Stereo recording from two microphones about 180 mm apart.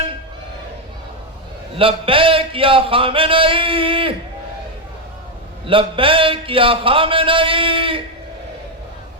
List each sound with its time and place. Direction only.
1.7 s speech: 30° right (ahead or behind)
5.6 s speech: 30° right (ahead or behind)